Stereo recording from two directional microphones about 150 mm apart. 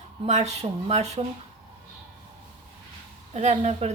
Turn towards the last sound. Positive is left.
turn(degrees=-45)  # may be behind; listen again after turning